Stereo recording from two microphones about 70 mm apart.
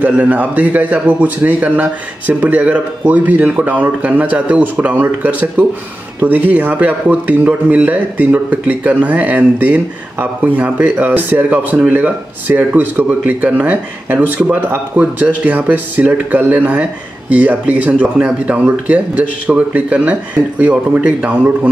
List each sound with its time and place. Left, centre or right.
0.0 s speech: right